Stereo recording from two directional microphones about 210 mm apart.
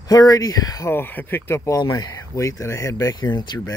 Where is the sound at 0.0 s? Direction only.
15° left (ahead or behind).